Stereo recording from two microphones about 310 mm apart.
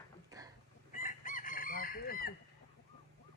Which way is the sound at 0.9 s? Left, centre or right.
Left.